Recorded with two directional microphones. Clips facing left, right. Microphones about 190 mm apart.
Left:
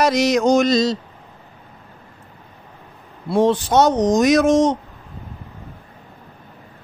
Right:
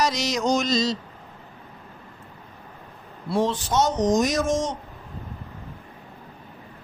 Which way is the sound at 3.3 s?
55° left (ahead or behind).